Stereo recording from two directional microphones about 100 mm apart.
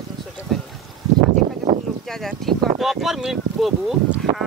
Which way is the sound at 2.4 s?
5° left (ahead or behind).